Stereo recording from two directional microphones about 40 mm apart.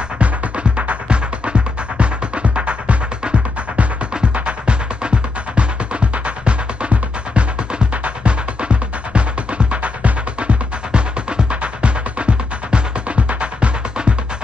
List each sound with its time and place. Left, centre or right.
0.7 s music: right